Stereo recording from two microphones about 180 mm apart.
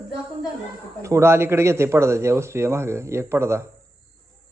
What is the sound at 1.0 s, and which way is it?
A man's voice, 15° right (ahead or behind).